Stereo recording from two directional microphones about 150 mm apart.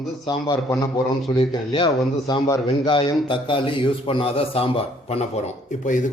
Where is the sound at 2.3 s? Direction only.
30° left (ahead or behind).